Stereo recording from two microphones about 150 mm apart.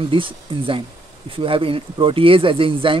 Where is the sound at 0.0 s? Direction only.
35° right (ahead or behind).